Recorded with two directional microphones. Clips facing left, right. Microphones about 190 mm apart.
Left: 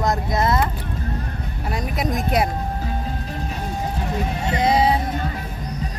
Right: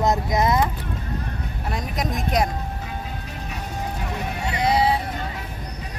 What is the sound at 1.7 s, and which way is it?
Speech, centre (ahead or behind).